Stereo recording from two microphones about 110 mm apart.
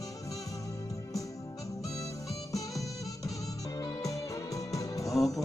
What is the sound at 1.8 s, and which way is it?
Music, 30° left (ahead or behind).